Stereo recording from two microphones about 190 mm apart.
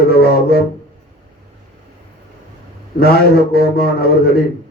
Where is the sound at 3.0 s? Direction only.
55° left (ahead or behind).